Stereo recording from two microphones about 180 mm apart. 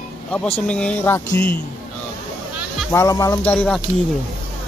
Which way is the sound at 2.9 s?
15° left (ahead or behind).